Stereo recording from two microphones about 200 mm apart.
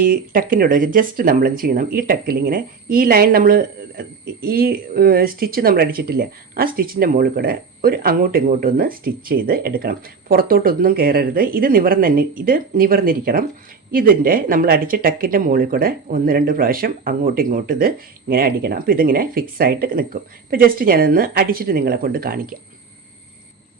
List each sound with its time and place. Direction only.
0.0 s speech: 45° right (ahead or behind)